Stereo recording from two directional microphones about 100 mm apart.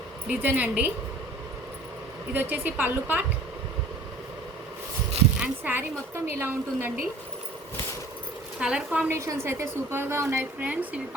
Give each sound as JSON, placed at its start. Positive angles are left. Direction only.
{"t": 0.3, "sound": "a woman's voice", "side_deg": -15}
{"t": 2.3, "sound": "a woman's voice", "side_deg": -20}
{"t": 5.4, "sound": "a woman's voice", "side_deg": -15}
{"t": 8.5, "sound": "a woman's voice", "side_deg": -10}
{"t": 9.0, "sound": "a woman's voice", "side_deg": -30}
{"t": 10.6, "sound": "a woman's voice", "side_deg": -15}